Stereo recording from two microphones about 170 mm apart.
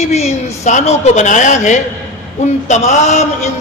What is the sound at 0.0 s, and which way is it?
A man's voice, 40° left (ahead or behind).